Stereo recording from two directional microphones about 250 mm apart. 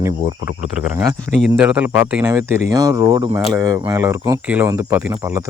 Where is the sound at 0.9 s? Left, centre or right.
Centre.